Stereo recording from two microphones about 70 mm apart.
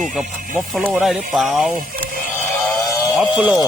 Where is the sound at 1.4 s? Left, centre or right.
Centre.